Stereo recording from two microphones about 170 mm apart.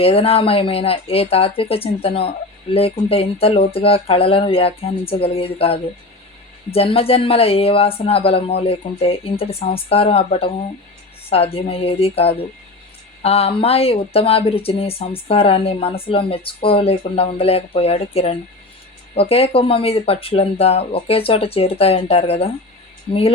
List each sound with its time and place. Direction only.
0.0 s speech: 35° left (ahead or behind)